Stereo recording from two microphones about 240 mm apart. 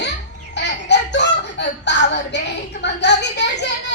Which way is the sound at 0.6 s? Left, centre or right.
Left.